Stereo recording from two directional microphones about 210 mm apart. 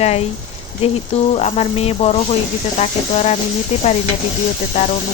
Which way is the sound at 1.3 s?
30° left (ahead or behind).